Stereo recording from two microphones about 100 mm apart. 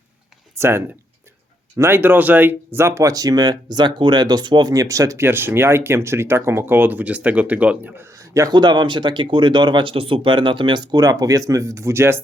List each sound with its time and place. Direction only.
0.5 s speech: 25° right (ahead or behind)
8.5 s speech: 50° right (ahead or behind); by 12.2 s 25° right (ahead or behind)